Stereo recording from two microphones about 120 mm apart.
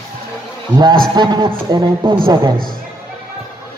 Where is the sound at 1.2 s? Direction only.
40° right (ahead or behind).